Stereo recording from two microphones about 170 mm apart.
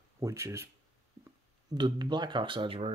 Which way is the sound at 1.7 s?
25° right (ahead or behind).